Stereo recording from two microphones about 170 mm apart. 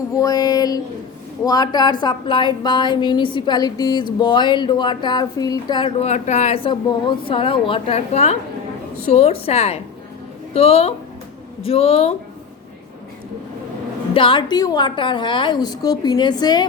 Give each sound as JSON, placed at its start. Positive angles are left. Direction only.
{"t": 0.1, "sound": "a woman's voice", "side_deg": 20}
{"t": 14.1, "sound": "a woman's voice", "side_deg": 30}